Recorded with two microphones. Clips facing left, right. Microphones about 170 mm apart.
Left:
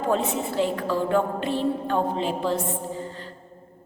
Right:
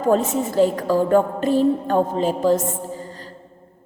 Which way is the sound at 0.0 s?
45° right (ahead or behind).